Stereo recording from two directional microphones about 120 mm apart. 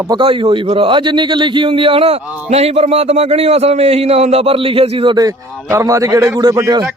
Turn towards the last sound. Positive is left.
turn(degrees=-30)  # may be behind; listen again after turning